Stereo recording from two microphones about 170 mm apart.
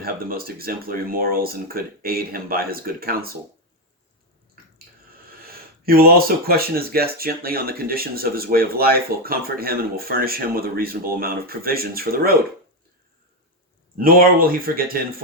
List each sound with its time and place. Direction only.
0.0 s speech: 60° right (ahead or behind)
4.6 s a sound: 60° right (ahead or behind)
5.4 s speech: 60° right (ahead or behind)
13.9 s speech: 60° right (ahead or behind)